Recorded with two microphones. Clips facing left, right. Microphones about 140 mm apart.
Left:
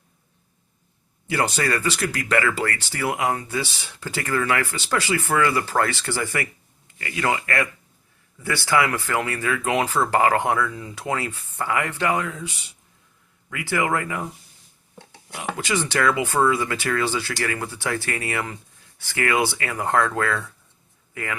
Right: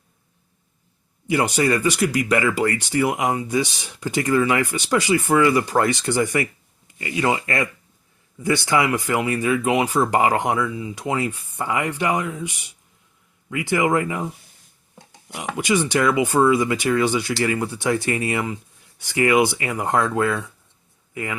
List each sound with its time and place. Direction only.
1.3 s speech: 15° right (ahead or behind)